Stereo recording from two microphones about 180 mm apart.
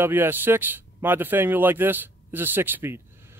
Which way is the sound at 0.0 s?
10° right (ahead or behind).